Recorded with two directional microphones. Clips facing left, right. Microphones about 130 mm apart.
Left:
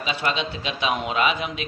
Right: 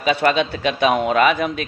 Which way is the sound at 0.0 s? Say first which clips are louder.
Right 8 dB; 55° right (ahead or behind).